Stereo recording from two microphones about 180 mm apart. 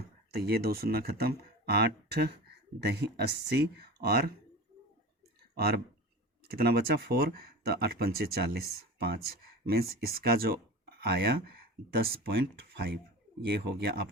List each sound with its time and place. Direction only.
0.0 s speech: 60° right (ahead or behind)
5.5 s speech: 60° right (ahead or behind)